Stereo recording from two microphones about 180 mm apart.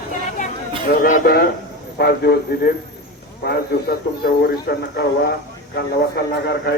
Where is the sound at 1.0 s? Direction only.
50° left (ahead or behind).